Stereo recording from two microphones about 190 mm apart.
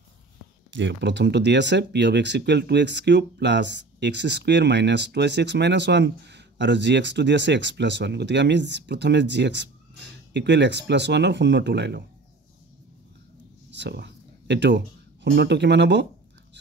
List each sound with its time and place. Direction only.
0.7 s speech: 75° right (ahead or behind)
13.7 s speech: 65° right (ahead or behind)